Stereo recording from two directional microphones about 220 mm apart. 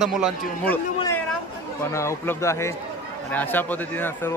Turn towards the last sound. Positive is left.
turn(degrees=10)  # may be behind; listen again after turning